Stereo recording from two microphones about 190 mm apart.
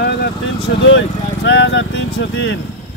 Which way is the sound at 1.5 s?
70° left (ahead or behind).